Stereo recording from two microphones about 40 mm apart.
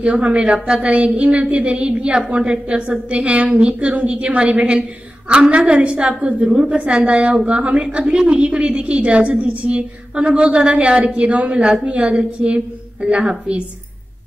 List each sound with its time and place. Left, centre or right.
0.0 s a woman's voice: right